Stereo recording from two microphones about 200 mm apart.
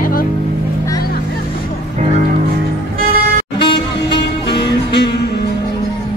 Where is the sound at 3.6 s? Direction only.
25° left (ahead or behind).